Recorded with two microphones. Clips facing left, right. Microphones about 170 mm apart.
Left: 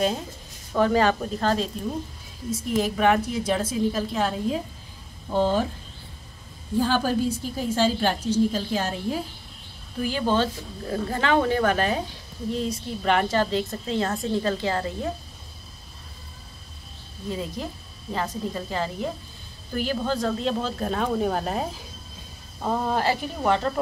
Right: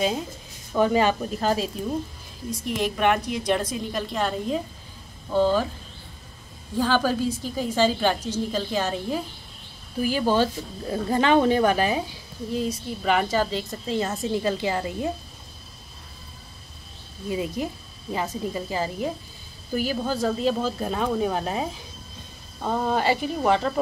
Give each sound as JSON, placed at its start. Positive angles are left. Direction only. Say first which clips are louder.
{"t": 0.7, "sound": "speech", "louder": "even", "side_deg": -5}
{"t": 2.5, "sound": "a woman's voice", "louder": "left 2 dB", "side_deg": 5}
{"t": 5.3, "sound": "a woman's voice", "louder": "right 2 dB", "side_deg": 15}
{"t": 7.2, "sound": "a woman's voice", "louder": "even", "side_deg": 5}
{"t": 9.9, "sound": "a woman's voice", "louder": "right 2 dB", "side_deg": -5}
{"t": 17.3, "sound": "a woman's voice", "louder": "right 3 dB", "side_deg": -15}